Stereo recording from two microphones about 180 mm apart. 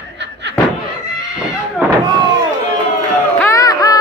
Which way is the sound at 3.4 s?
15° left (ahead or behind).